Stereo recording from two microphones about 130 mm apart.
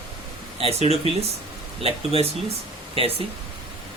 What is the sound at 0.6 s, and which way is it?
Speech, 50° right (ahead or behind).